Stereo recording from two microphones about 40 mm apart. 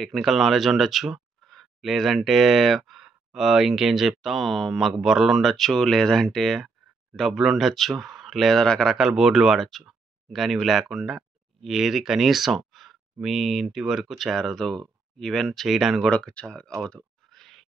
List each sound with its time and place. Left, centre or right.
0.0 s speech: centre
9.7 s speech: centre
14.4 s speech: centre
16.1 s speech: left
17.3 s plop: centre